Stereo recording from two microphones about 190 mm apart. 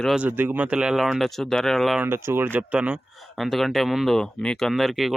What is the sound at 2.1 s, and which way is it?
Speech, 15° right (ahead or behind).